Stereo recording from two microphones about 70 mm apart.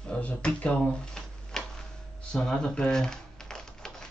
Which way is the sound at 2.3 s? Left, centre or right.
Centre.